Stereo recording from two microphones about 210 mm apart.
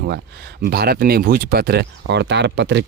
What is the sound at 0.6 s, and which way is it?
Speech, 50° right (ahead or behind).